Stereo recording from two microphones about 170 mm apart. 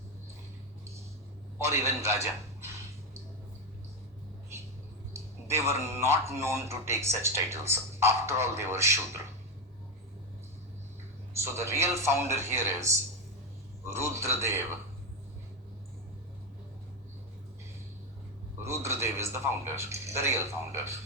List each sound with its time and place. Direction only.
1.5 s a man's voice: 15° right (ahead or behind)
5.1 s a man's voice: 15° right (ahead or behind)
11.3 s a man's voice: 15° right (ahead or behind)
18.6 s a man's voice: 15° right (ahead or behind)